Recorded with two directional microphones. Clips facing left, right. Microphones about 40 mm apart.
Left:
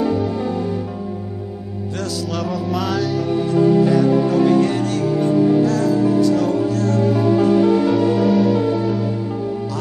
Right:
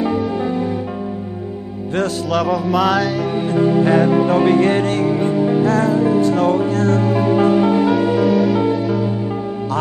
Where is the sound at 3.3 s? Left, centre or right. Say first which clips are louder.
Left 1 dB; right.